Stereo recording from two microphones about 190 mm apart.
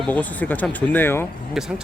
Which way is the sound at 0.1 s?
10° left (ahead or behind).